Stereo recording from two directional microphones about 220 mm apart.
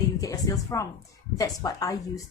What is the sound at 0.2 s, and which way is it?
A woman's voice, 15° left (ahead or behind).